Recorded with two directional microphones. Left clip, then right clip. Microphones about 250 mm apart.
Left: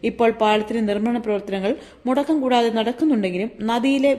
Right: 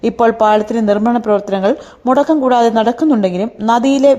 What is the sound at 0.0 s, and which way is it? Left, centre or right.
Speech, right.